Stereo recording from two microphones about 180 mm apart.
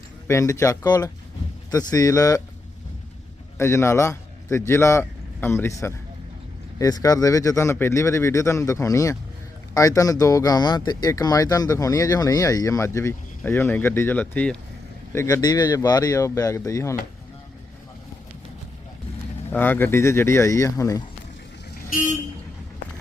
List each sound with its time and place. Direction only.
0.3 s speech: 15° left (ahead or behind)
3.6 s a man's voice: 15° left (ahead or behind)
19.5 s speech: 10° left (ahead or behind)
21.9 s speech: 45° left (ahead or behind)